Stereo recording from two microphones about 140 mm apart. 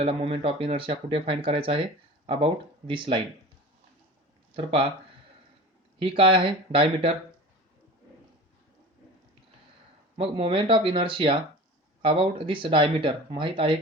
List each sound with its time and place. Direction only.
0.0 s speech: 40° right (ahead or behind)
4.5 s speech: 40° right (ahead or behind)
6.0 s speech: 40° right (ahead or behind)
10.2 s speech: 40° right (ahead or behind)